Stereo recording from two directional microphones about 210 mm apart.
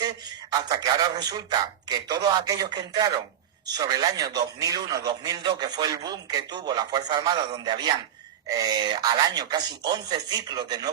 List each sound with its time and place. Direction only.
0.0 s a man's voice: 20° right (ahead or behind)